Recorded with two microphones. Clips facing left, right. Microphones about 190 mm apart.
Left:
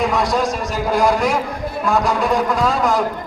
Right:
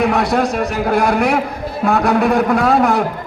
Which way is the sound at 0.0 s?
65° right (ahead or behind).